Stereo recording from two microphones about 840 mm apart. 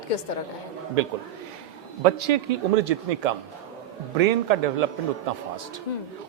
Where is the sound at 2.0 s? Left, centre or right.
Right.